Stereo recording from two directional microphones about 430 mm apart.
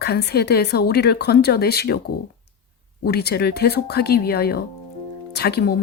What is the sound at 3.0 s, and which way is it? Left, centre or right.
Speech, left.